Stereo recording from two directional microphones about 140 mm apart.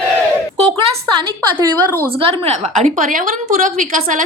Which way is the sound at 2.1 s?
45° right (ahead or behind).